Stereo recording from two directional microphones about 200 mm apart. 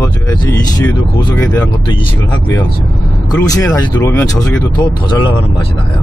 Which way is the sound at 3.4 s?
20° left (ahead or behind).